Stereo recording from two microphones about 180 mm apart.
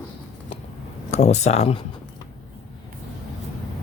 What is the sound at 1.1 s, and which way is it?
Speech, 35° left (ahead or behind).